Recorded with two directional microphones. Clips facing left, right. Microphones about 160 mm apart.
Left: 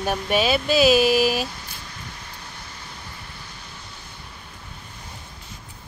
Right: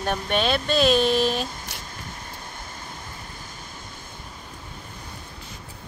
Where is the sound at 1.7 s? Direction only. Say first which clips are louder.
Right 2 dB; 80° right.